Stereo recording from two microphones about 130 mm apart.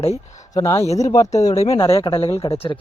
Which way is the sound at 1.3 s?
60° left (ahead or behind).